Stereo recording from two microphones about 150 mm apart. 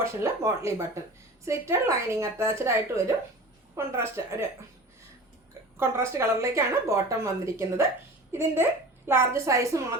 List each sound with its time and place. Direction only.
0.0 s a woman's voice: 20° right (ahead or behind)
5.7 s a woman's voice: 15° right (ahead or behind)